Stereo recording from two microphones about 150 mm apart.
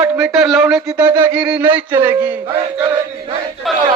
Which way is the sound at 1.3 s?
5° right (ahead or behind).